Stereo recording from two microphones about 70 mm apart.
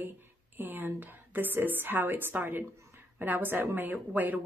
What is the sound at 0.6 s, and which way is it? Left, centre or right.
Speech, right.